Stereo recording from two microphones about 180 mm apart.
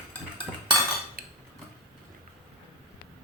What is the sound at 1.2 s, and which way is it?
Cutlery, 55° right (ahead or behind).